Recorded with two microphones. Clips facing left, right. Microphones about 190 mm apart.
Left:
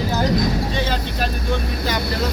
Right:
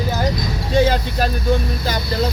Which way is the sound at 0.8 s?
45° right (ahead or behind).